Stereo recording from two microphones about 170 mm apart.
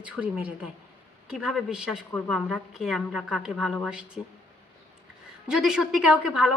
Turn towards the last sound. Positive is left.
turn(degrees=-5)  # may be behind; listen again after turning